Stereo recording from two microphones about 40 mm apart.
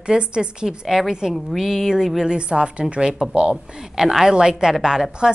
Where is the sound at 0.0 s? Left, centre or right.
Right.